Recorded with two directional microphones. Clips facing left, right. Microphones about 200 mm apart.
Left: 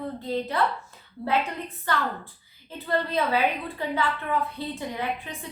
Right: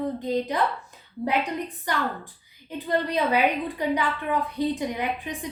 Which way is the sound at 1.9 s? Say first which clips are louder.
Left 1 dB; 15° right (ahead or behind).